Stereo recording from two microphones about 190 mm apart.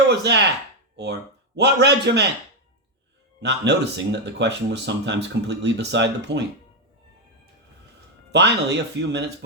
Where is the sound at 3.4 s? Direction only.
65° right (ahead or behind).